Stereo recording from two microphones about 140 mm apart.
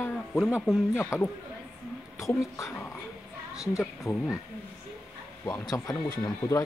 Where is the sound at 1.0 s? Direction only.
15° left (ahead or behind).